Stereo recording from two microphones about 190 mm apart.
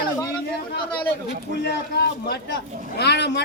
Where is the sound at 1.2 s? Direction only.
60° left (ahead or behind).